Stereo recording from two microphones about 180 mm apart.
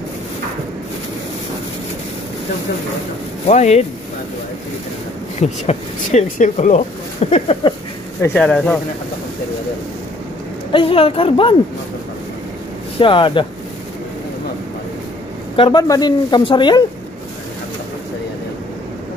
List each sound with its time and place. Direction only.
3.4 s speech: 35° left (ahead or behind)
5.4 s speech: 40° left (ahead or behind)
8.2 s speech: 10° left (ahead or behind)
10.7 s speech: 30° left (ahead or behind)
13.0 s speech: 25° left (ahead or behind)
15.5 s speech: 25° left (ahead or behind)